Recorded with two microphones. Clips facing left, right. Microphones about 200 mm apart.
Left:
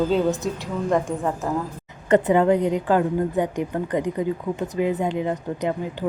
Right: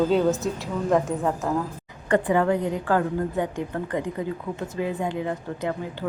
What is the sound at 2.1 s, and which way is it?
A woman's voice, 20° left (ahead or behind).